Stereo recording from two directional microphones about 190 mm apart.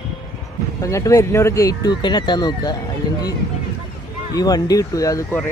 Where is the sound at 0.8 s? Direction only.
15° left (ahead or behind).